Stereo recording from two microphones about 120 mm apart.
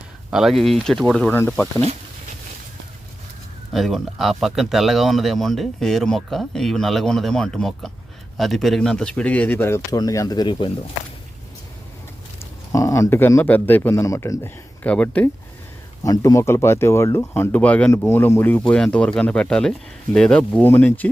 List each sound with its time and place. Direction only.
0.3 s speech: 5° right (ahead or behind)
3.7 s speech: centre (ahead or behind); by 10.7 s 40° left (ahead or behind)
12.7 s speech: 25° left (ahead or behind)
14.8 s speech: 10° left (ahead or behind)
16.0 s speech: 25° left (ahead or behind)